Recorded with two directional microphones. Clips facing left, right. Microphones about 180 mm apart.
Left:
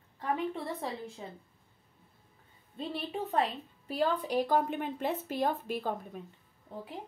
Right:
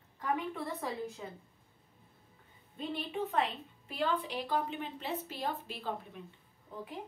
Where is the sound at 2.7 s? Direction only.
35° left (ahead or behind).